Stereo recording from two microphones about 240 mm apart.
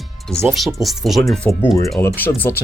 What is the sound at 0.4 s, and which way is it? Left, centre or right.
Speech, centre.